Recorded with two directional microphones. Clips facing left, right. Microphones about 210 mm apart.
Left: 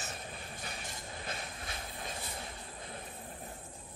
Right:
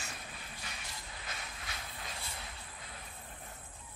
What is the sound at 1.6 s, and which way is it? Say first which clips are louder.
Vehicle: left 4 dB; 25° left (ahead or behind).